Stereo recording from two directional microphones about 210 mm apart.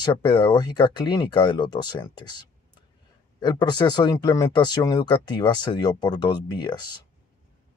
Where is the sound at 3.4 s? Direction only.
20° left (ahead or behind).